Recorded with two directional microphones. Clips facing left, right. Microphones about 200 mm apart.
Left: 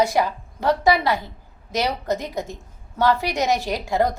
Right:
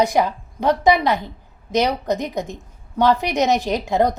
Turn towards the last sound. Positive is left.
turn(degrees=-20)  # may be behind; listen again after turning